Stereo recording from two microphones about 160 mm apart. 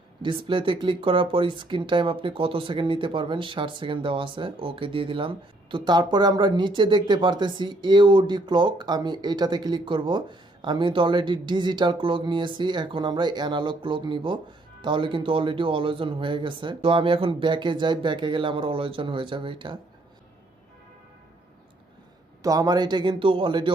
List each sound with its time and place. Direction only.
0.2 s speech: 30° right (ahead or behind)
22.4 s speech: 25° right (ahead or behind)